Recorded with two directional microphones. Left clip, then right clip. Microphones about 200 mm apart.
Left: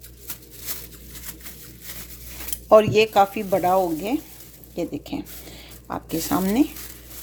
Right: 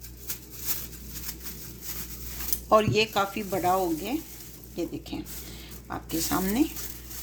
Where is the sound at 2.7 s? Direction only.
40° left (ahead or behind).